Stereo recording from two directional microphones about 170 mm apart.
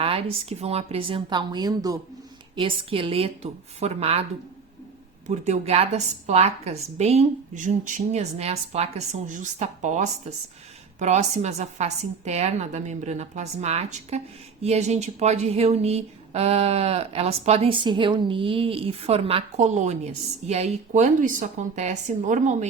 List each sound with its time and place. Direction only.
0.0 s speech: 35° right (ahead or behind)
5.3 s a woman's voice: 40° right (ahead or behind)